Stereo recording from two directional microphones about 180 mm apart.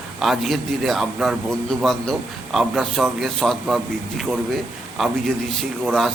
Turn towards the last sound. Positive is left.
turn(degrees=0)  # may be behind; listen again after turning